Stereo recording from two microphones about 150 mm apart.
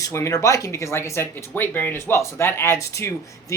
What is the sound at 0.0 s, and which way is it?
Speech, 20° left (ahead or behind).